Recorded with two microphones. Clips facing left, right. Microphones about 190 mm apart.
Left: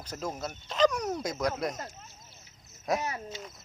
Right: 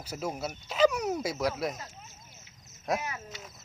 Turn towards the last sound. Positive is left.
turn(degrees=30)  # may be behind; listen again after turning